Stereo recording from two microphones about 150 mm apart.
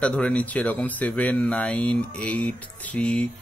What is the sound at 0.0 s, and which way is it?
Speech, 5° left (ahead or behind).